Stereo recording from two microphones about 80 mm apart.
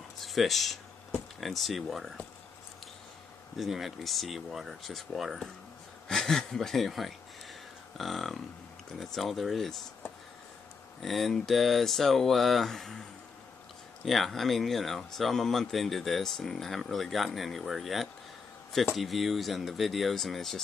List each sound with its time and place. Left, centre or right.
0.2 s speech: centre
3.5 s speech: centre
11.0 s speech: centre
14.0 s speech: centre